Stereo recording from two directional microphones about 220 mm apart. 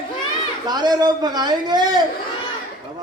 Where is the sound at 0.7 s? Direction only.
20° right (ahead or behind).